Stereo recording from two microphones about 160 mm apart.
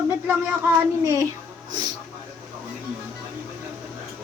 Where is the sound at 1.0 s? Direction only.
20° right (ahead or behind).